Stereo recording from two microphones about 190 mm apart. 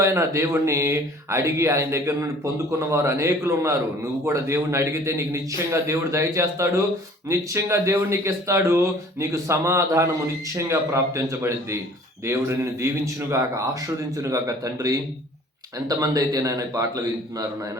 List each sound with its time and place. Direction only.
0.0 s speech: 15° right (ahead or behind)